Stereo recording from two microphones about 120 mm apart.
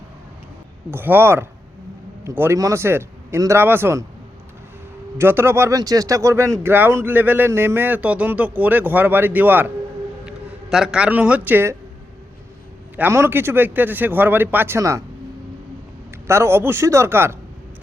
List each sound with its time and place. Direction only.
0.9 s a man's voice: 20° right (ahead or behind)
5.1 s a man's voice: 20° right (ahead or behind)
10.2 s speech: 5° right (ahead or behind); by 11.8 s 20° right (ahead or behind)
13.0 s speech: 20° right (ahead or behind)
16.2 s a man's voice: 20° right (ahead or behind)